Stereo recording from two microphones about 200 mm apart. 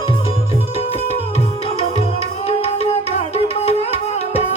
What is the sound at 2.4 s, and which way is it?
Music, 30° left (ahead or behind).